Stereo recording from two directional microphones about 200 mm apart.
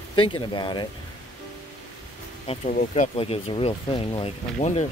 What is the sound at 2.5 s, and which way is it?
Speech, 35° left (ahead or behind).